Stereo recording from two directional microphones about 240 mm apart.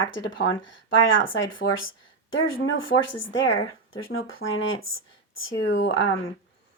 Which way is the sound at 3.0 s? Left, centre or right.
Left.